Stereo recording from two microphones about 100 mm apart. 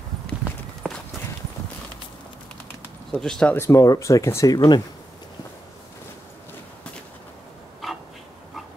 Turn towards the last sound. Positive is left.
turn(degrees=0)  # may be behind; listen again after turning